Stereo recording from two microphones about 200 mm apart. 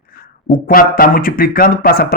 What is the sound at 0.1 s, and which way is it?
Speech, 45° left (ahead or behind).